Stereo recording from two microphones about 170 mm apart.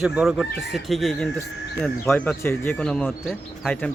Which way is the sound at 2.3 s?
10° left (ahead or behind).